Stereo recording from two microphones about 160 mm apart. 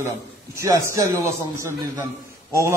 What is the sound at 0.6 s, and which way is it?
A man's voice, 20° right (ahead or behind).